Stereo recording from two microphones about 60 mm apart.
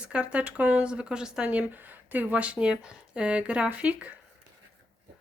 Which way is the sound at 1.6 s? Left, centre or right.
Right.